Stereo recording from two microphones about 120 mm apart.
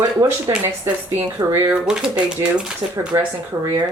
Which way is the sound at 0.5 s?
35° right (ahead or behind).